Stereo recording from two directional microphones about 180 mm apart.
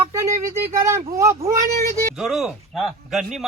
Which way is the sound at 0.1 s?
15° right (ahead or behind).